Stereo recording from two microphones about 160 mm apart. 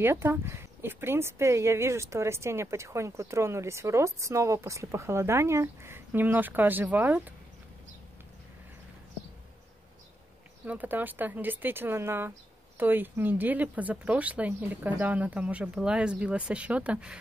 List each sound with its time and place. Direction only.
0.0 s speech: 15° right (ahead or behind)
10.6 s speech: 10° right (ahead or behind)